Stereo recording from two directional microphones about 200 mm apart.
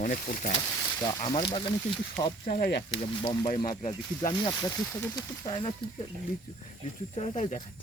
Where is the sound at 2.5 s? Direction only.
45° left (ahead or behind).